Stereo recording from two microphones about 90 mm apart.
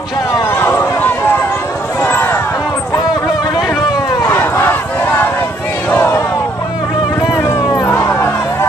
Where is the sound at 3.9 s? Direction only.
40° left (ahead or behind).